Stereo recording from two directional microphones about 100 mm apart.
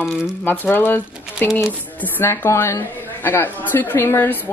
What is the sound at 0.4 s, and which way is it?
A woman's voice, 20° left (ahead or behind).